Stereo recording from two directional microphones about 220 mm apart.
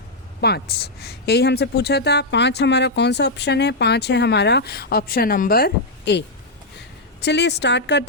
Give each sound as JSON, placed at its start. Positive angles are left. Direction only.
{"t": 0.4, "sound": "speech", "side_deg": 45}